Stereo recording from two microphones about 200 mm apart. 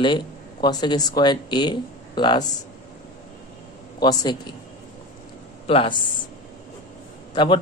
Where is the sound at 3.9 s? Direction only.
20° left (ahead or behind).